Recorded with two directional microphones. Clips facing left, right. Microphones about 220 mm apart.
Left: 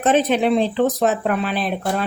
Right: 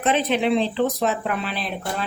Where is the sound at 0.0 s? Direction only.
45° left (ahead or behind).